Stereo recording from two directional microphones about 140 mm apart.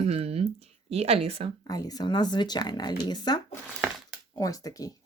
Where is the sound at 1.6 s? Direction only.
25° left (ahead or behind).